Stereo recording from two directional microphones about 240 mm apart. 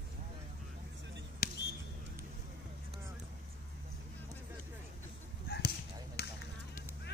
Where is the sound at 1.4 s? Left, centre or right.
Left.